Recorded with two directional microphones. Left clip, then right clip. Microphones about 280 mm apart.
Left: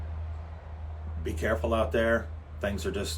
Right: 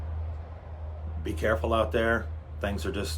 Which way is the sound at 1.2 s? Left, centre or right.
Centre.